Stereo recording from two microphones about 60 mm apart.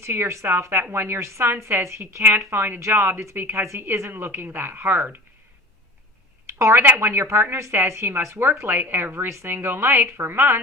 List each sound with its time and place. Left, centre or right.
0.0 s a woman's voice: right
3.3 s a woman's voice: right
6.7 s a woman's voice: right
7.0 s a woman's voice: right